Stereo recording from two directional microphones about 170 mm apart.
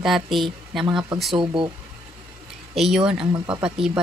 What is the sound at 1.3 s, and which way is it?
Speech, 30° right (ahead or behind).